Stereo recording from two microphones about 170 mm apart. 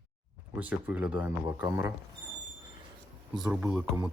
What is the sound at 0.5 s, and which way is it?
Speech, 10° right (ahead or behind).